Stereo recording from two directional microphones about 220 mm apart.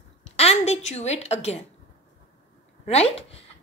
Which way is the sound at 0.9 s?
30° left (ahead or behind).